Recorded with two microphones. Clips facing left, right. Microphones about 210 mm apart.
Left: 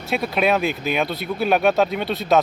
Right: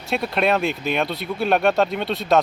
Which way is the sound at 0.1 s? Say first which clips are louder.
Left 1 dB; centre (ahead or behind).